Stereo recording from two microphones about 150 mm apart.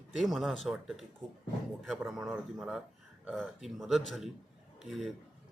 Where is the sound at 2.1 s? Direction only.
5° right (ahead or behind).